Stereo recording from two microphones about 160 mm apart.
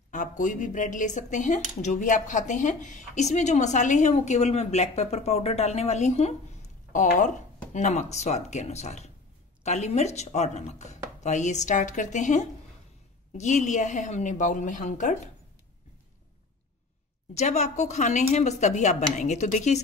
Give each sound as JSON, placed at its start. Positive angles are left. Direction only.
{"t": 0.1, "sound": "speech", "side_deg": 50}
{"t": 17.3, "sound": "speech", "side_deg": 45}